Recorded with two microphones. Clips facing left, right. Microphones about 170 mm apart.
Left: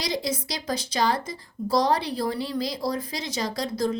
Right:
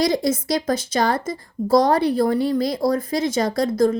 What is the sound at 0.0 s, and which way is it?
Speech, 50° right (ahead or behind).